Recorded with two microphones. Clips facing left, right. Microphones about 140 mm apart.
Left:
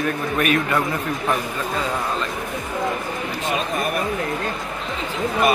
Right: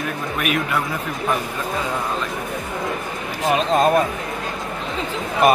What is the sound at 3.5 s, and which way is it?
Speech, 90° right.